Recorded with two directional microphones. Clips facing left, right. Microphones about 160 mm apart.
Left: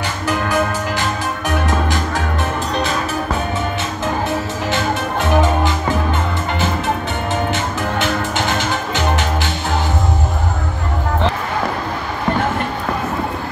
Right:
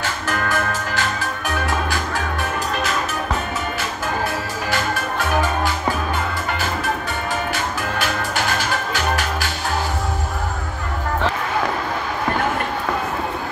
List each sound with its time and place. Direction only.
0.0 s music: 15° left (ahead or behind)
8.9 s music: 20° left (ahead or behind)